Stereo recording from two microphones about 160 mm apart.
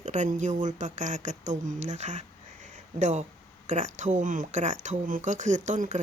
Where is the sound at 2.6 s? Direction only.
50° right (ahead or behind).